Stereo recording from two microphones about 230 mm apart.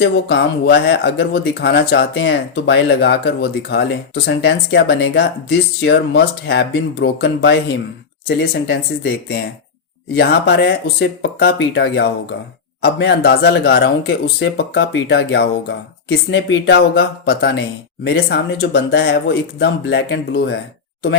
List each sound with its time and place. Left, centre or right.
0.0 s speech: left
10.2 s speech: left